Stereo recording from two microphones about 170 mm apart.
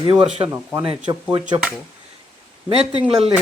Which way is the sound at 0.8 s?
30° right (ahead or behind).